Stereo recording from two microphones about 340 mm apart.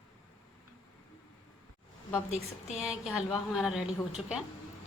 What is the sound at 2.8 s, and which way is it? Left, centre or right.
A woman's voice, centre.